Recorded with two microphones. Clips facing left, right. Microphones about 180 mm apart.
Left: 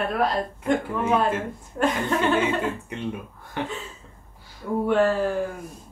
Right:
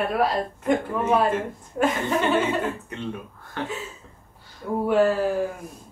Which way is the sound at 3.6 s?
15° left (ahead or behind).